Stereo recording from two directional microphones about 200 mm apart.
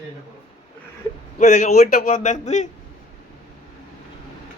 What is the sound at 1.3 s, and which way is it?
Speech, 35° left (ahead or behind).